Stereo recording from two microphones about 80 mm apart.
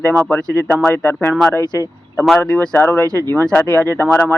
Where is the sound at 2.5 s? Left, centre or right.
Centre.